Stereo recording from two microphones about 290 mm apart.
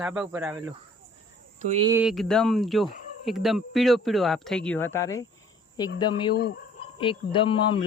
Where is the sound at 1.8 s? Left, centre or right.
Centre.